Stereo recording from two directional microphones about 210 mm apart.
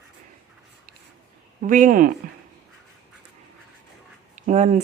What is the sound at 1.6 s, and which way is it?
Speech, 40° right (ahead or behind).